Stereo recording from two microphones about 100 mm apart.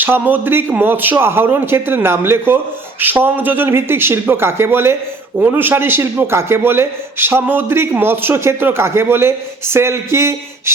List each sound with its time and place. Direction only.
0.0 s a man's voice: 20° right (ahead or behind)